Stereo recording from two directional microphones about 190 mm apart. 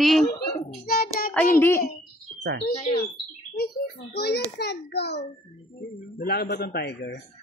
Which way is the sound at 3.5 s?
55° left (ahead or behind).